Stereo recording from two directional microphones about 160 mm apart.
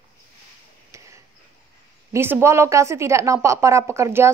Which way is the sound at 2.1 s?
15° right (ahead or behind).